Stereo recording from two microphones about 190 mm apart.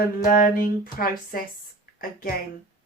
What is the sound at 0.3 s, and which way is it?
Speech, 45° left (ahead or behind).